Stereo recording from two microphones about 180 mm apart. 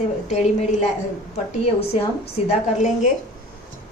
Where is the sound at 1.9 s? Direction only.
35° left (ahead or behind).